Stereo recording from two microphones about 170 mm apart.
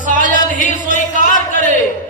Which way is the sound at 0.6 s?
50° left (ahead or behind).